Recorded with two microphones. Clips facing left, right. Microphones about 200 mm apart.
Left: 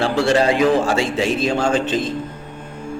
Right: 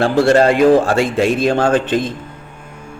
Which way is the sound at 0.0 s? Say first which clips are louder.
Right 5 dB; 50° right (ahead or behind).